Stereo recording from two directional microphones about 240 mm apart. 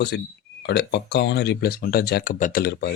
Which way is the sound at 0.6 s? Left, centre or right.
Left.